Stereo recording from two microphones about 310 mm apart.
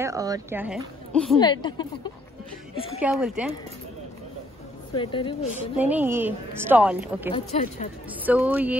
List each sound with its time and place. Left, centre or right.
0.0 s a woman's voice: centre
1.4 s speech: centre
3.0 s a woman's voice: centre
4.9 s speech: centre
5.9 s a woman's voice: centre
7.3 s speech: centre
8.3 s a woman's voice: centre